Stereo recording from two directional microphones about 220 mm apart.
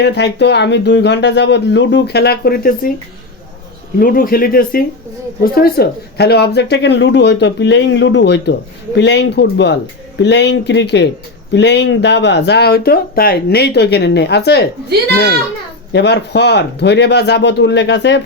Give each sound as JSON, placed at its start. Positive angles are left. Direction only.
{"t": 0.0, "sound": "speech", "side_deg": 50}
{"t": 3.9, "sound": "speech", "side_deg": 40}
{"t": 15.9, "sound": "speech", "side_deg": 50}